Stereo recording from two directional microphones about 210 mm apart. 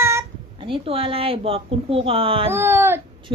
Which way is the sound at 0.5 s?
25° right (ahead or behind).